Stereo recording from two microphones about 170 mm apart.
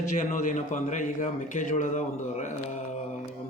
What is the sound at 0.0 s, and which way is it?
A man's voice, 45° left (ahead or behind).